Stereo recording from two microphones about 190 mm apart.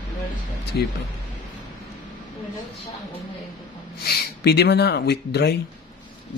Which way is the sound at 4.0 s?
55° left (ahead or behind).